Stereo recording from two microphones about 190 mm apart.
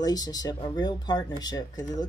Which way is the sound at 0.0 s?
20° left (ahead or behind).